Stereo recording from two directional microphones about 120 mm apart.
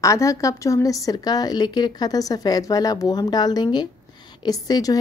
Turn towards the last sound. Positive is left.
turn(degrees=30)  # may be behind; listen again after turning